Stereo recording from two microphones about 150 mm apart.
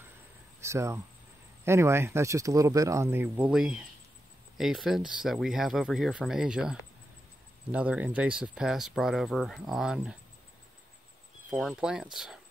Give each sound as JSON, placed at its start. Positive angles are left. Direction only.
{"t": 0.6, "sound": "speech", "side_deg": -20}
{"t": 11.5, "sound": "speech", "side_deg": -5}